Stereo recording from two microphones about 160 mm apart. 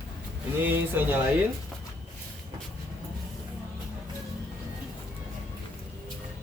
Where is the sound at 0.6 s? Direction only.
15° right (ahead or behind).